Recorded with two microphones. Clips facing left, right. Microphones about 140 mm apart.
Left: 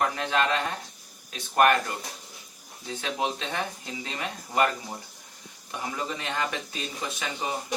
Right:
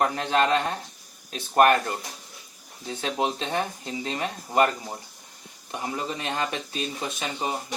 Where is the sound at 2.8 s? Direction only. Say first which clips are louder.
Right 3 dB; 30° right (ahead or behind).